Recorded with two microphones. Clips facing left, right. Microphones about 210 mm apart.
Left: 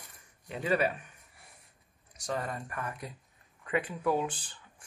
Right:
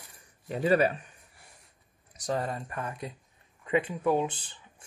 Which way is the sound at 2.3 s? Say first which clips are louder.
Right 2 dB; 30° right (ahead or behind).